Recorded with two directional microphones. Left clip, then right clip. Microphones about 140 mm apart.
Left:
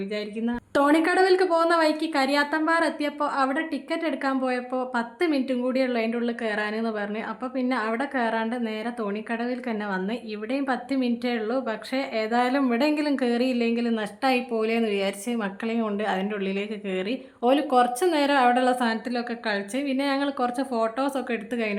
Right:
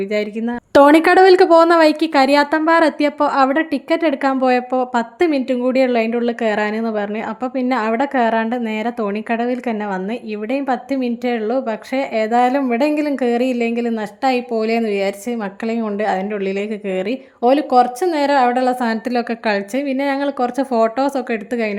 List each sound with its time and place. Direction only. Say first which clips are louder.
0.1 s a woman's voice: right 9 dB; 45° right (ahead or behind)
20.7 s a woman's voice: right 11 dB; 45° right (ahead or behind)